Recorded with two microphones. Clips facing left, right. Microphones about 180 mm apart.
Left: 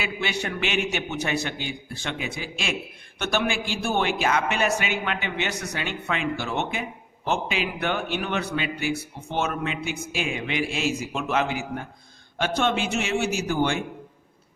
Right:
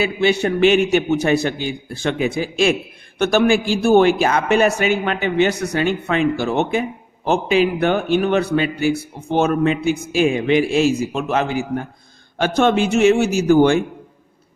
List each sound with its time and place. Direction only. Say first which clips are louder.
0.0 s a man's voice: right 12 dB; 30° right (ahead or behind)